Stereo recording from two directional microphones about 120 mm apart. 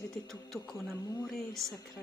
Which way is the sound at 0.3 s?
Centre (ahead or behind).